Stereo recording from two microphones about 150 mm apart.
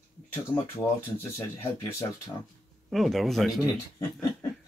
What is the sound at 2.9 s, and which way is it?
Speech, centre (ahead or behind).